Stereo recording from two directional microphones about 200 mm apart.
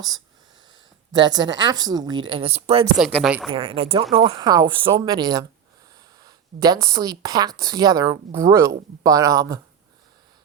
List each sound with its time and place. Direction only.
1.1 s a woman's voice: 20° right (ahead or behind)
3.2 s a woman's voice: 5° right (ahead or behind)
3.5 s a woman's voice: 30° right (ahead or behind)